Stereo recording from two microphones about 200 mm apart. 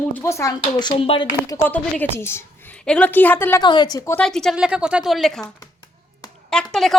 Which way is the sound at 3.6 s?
20° left (ahead or behind).